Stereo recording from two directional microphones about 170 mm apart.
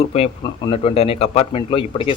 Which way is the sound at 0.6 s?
35° left (ahead or behind).